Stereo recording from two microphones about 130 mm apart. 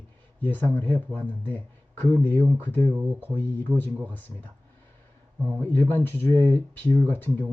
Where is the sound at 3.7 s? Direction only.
10° right (ahead or behind).